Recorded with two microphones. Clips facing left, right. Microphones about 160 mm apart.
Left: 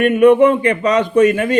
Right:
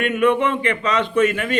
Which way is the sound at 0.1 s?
35° left (ahead or behind).